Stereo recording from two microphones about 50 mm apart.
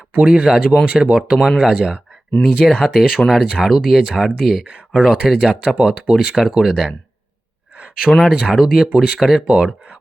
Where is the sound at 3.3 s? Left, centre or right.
Centre.